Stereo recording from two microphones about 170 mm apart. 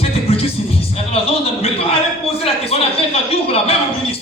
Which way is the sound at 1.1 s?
35° left (ahead or behind).